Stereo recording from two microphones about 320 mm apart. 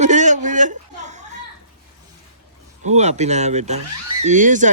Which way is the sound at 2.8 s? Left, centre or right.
Right.